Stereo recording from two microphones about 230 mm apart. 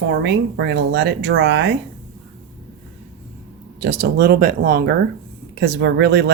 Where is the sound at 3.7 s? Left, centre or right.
Right.